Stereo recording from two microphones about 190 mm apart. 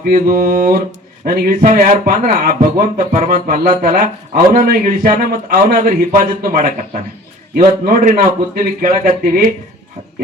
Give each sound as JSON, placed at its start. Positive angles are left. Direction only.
{"t": 0.0, "sound": "speech", "side_deg": -50}